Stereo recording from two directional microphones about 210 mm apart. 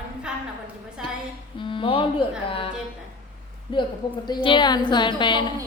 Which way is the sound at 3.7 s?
20° left (ahead or behind).